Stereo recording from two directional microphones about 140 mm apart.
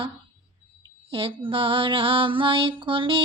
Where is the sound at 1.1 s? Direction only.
40° right (ahead or behind).